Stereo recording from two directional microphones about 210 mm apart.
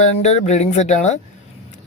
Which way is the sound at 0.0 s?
30° left (ahead or behind).